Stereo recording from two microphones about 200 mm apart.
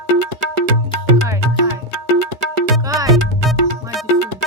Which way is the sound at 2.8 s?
15° right (ahead or behind).